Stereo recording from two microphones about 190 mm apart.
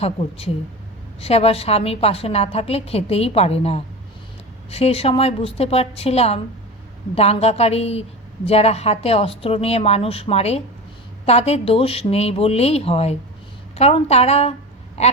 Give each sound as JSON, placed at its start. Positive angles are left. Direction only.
{"t": 0.0, "sound": "a woman's voice", "side_deg": 30}